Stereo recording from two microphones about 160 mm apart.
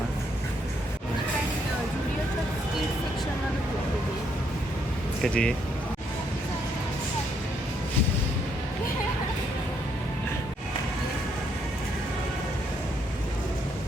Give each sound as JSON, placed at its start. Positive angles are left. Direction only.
{"t": 5.2, "sound": "speech", "side_deg": 5}